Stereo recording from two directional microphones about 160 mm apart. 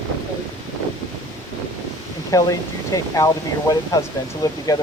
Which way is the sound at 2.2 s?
20° left (ahead or behind).